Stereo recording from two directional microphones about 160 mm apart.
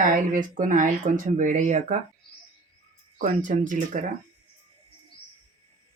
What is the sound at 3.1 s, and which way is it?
Speech, 55° right (ahead or behind).